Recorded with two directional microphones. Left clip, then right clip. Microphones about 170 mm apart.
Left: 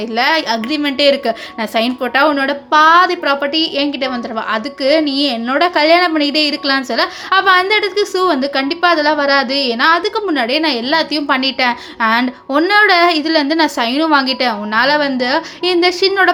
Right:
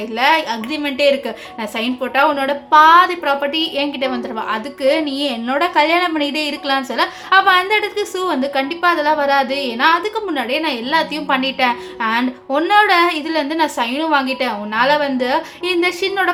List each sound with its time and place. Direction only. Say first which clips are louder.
0.2 s a woman's voice: left 1 dB; 25° left (ahead or behind)